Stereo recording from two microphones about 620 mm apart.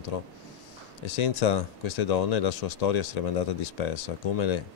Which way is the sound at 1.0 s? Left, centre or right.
Left.